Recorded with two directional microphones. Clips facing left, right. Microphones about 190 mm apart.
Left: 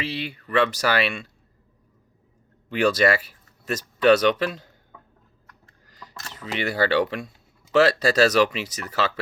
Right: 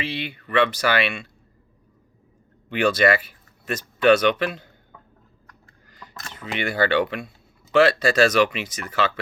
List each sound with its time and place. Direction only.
0.0 s speech: 40° left (ahead or behind)
2.6 s speech: 40° left (ahead or behind)
6.5 s speech: 35° left (ahead or behind)